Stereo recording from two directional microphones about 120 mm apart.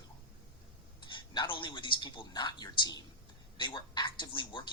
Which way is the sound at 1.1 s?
40° left (ahead or behind).